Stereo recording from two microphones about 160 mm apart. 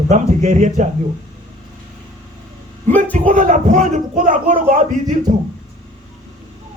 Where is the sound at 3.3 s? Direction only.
50° right (ahead or behind).